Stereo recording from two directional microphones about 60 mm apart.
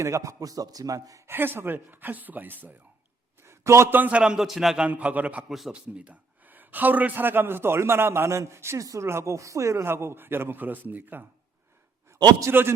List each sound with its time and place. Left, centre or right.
0.0 s a man's voice: right
1.3 s a man's voice: right
3.4 s a sound: right
3.8 s a man's voice: right
4.1 s a man's voice: centre
4.9 s a man's voice: right
5.5 s a man's voice: centre
5.7 s a man's voice: right
9.0 s speech: right
12.5 s a man's voice: right